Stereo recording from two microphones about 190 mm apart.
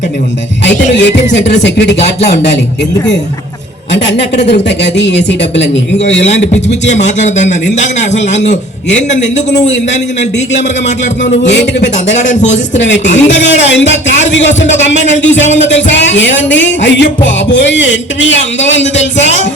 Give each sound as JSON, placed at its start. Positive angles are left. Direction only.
{"t": 0.9, "sound": "speech", "side_deg": 65}
{"t": 3.9, "sound": "speech", "side_deg": 65}
{"t": 6.1, "sound": "a man's voice", "side_deg": 35}
{"t": 13.5, "sound": "music", "side_deg": 70}
{"t": 15.0, "sound": "a man's voice", "side_deg": 40}
{"t": 15.7, "sound": "music", "side_deg": 70}